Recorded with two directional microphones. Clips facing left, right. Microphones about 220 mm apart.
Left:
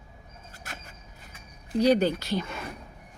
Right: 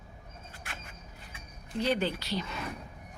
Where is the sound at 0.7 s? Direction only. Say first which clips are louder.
Left 3 dB; 40° left (ahead or behind).